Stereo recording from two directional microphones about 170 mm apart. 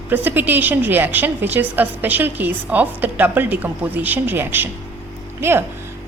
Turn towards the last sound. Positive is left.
turn(degrees=-15)  # may be behind; listen again after turning